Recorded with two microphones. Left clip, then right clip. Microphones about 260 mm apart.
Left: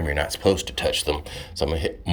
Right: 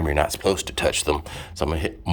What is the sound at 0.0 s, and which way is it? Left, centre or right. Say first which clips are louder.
Speech: right 1 dB; centre.